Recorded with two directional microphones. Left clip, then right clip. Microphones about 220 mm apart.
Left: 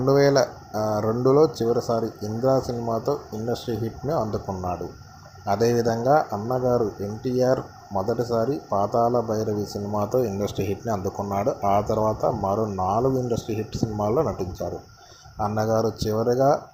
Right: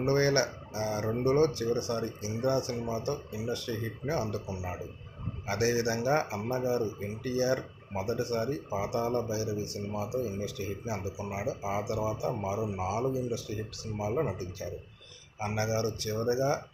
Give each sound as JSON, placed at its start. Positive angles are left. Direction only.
{"t": 0.0, "sound": "speech", "side_deg": 25}
{"t": 15.4, "sound": "speech", "side_deg": 25}